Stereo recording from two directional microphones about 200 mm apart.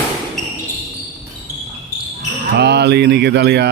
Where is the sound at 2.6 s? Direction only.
55° right (ahead or behind).